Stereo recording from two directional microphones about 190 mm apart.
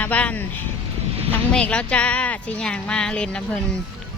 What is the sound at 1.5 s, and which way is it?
Speech, 5° left (ahead or behind).